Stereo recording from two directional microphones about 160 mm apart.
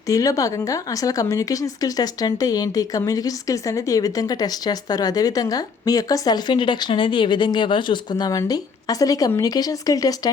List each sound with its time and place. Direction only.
0.1 s a woman's voice: 20° left (ahead or behind)